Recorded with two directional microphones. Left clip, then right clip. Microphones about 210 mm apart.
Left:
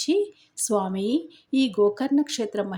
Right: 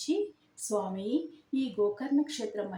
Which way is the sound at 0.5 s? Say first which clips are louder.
Left 8 dB; 25° left (ahead or behind).